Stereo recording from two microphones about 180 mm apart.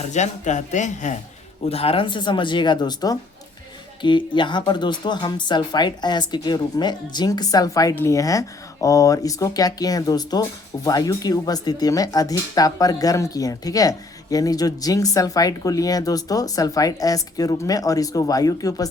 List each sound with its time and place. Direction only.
0.1 s speech: 40° left (ahead or behind)
1.7 s speech: 30° left (ahead or behind)